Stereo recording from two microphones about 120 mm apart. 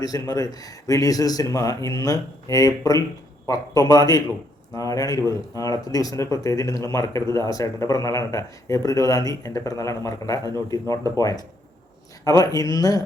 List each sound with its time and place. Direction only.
0.0 s speech: 30° left (ahead or behind)